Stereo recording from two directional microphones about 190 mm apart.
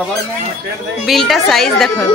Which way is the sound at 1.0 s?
Centre (ahead or behind).